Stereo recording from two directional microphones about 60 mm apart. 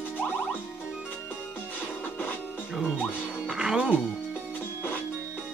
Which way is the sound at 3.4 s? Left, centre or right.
Centre.